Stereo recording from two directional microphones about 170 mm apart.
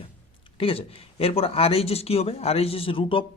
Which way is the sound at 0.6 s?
35° left (ahead or behind).